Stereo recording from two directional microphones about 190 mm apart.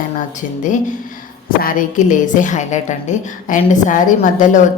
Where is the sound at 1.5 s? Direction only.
45° left (ahead or behind).